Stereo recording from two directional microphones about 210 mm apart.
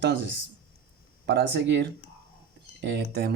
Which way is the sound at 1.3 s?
55° right (ahead or behind).